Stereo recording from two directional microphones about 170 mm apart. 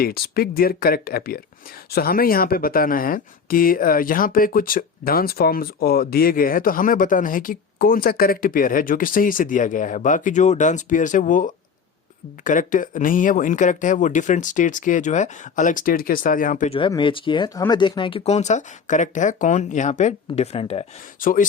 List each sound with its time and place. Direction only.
0.0 s speech: 65° left (ahead or behind)
16.6 s speech: 35° left (ahead or behind)
21.2 s speech: 55° left (ahead or behind)